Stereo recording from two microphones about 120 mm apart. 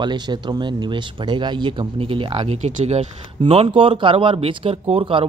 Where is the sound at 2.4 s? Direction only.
65° right (ahead or behind).